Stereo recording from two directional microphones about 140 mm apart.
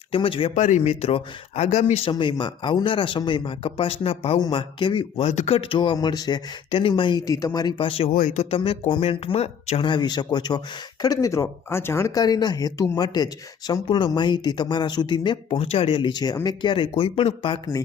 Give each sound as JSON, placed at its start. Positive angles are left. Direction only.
{"t": 0.1, "sound": "speech", "side_deg": 40}
{"t": 0.5, "sound": "speech", "side_deg": 60}
{"t": 2.1, "sound": "speech", "side_deg": 35}
{"t": 5.3, "sound": "speech", "side_deg": 50}
{"t": 8.1, "sound": "speech", "side_deg": 60}
{"t": 8.4, "sound": "speech", "side_deg": 45}